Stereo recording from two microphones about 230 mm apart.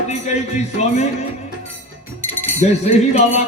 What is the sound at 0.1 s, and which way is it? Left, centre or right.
Music, left.